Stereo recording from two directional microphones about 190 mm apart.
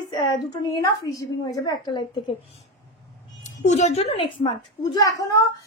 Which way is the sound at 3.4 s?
40° left (ahead or behind).